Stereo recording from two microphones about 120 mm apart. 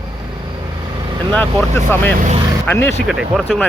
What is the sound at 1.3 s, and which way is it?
Speech, 15° left (ahead or behind).